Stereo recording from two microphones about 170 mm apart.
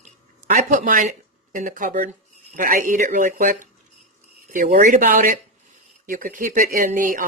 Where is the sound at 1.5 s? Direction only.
50° right (ahead or behind).